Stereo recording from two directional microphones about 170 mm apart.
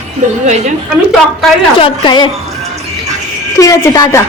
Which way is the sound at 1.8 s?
25° left (ahead or behind).